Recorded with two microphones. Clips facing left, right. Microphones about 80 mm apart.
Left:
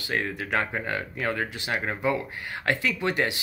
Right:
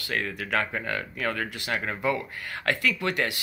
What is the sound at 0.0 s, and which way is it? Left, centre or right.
Speech, left.